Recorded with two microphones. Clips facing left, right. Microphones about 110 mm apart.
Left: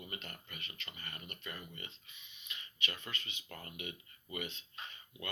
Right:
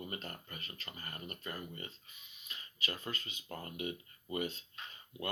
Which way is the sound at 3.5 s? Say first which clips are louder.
Right 6 dB; 30° right (ahead or behind).